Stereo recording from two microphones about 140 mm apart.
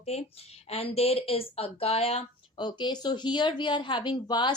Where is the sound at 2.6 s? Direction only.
30° left (ahead or behind).